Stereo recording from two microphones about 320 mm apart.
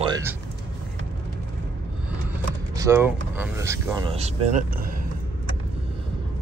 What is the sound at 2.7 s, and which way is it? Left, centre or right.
Speech, centre.